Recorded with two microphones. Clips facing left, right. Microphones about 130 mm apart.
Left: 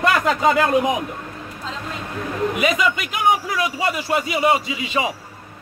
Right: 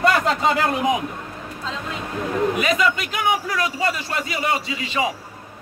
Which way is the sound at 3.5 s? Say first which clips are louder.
Left 1 dB; 15° left (ahead or behind).